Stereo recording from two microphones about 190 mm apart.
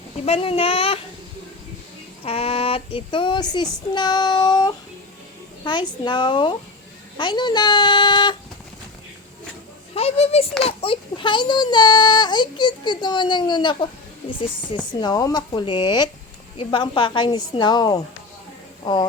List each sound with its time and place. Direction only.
0.3 s child singing: 30° left (ahead or behind)
2.2 s child singing: 30° left (ahead or behind)
9.9 s speech: 30° left (ahead or behind)
10.6 s child singing: 30° left (ahead or behind)